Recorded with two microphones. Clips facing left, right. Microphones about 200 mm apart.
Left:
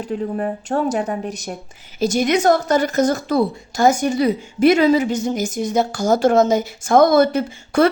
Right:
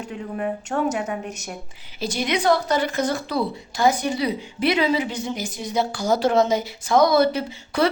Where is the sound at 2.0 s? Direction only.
45° left (ahead or behind).